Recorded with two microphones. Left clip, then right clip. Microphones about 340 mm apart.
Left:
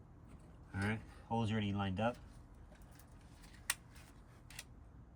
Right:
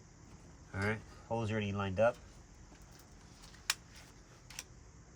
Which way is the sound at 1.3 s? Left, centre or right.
Right.